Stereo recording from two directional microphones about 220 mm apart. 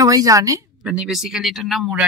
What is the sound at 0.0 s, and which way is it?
Speech, 15° right (ahead or behind).